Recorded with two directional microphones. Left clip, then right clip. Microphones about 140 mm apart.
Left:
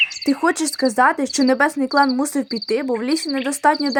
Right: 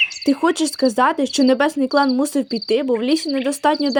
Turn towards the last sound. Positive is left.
turn(degrees=-25)  # may be behind; listen again after turning